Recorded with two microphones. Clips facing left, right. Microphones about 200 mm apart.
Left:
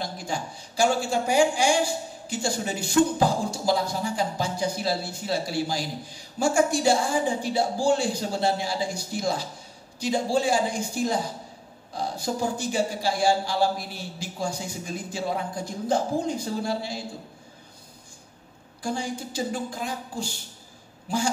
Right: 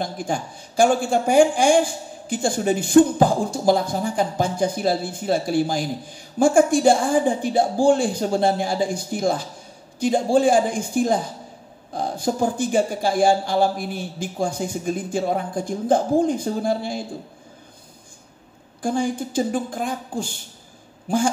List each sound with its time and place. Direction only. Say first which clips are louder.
0.0 s speech: right 5 dB; 50° right (ahead or behind)
18.8 s speech: right 7 dB; 50° right (ahead or behind)